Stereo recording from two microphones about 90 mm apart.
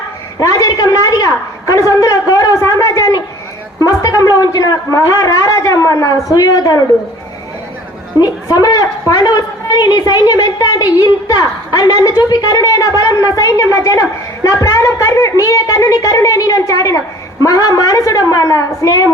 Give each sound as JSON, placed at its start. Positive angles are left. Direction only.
{"t": 0.3, "sound": "a woman's voice", "side_deg": 40}
{"t": 8.2, "sound": "a woman's voice", "side_deg": 45}